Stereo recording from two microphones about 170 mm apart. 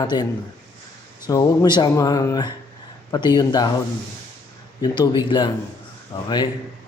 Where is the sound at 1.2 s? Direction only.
20° left (ahead or behind).